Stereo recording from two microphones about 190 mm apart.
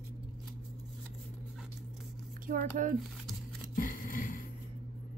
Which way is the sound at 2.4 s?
45° right (ahead or behind).